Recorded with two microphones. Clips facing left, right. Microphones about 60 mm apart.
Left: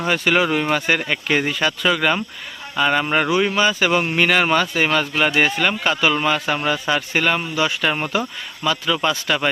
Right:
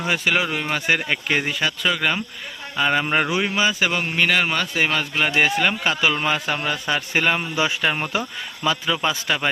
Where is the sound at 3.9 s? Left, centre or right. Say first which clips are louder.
Left 3 dB; centre.